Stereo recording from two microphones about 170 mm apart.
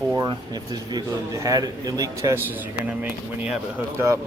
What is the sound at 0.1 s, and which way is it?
Speech, 20° right (ahead or behind).